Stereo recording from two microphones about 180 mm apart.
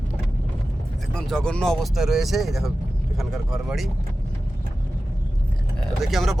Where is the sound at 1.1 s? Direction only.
5° left (ahead or behind).